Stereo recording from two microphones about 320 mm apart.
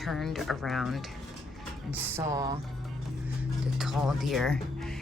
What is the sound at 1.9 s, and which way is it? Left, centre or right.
Music, centre.